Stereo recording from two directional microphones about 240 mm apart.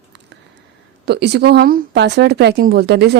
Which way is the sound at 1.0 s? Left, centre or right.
Right.